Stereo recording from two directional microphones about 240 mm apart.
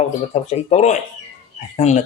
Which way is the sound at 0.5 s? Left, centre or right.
Left.